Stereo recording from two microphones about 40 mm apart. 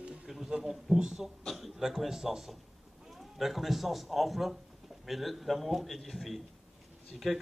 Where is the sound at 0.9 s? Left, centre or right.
Centre.